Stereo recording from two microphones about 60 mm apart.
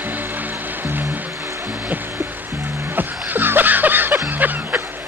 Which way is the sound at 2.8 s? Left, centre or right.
Right.